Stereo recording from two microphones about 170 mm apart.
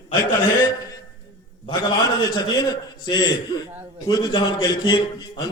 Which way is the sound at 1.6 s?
25° left (ahead or behind).